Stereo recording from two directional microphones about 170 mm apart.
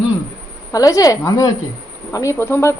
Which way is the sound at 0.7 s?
20° left (ahead or behind).